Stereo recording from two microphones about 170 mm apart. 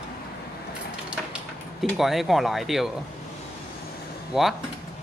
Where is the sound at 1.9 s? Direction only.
Centre (ahead or behind).